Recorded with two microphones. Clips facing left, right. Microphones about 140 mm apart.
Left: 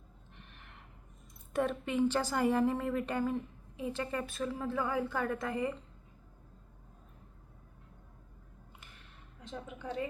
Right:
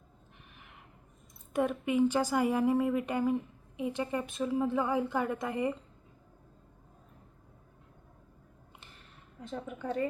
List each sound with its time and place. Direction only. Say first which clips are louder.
0.3 s a sound: even; 5° right (ahead or behind)
1.5 s a woman's voice: right 3 dB; 10° right (ahead or behind)
9.4 s a woman's voice: right 5 dB; 50° right (ahead or behind)